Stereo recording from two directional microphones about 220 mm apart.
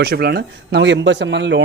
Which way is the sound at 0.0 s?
45° right (ahead or behind).